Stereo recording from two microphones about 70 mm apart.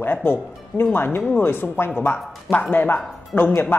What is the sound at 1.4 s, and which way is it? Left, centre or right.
Speech, left.